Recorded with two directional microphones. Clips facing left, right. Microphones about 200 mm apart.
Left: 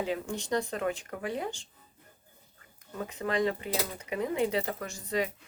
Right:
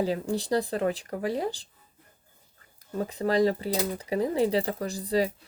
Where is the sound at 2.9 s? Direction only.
35° right (ahead or behind).